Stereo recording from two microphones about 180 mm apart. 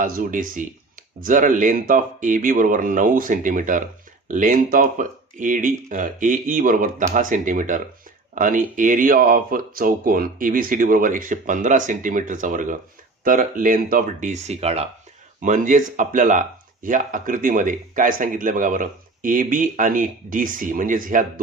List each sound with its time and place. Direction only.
0.0 s speech: 45° right (ahead or behind)
15.4 s speech: 45° right (ahead or behind)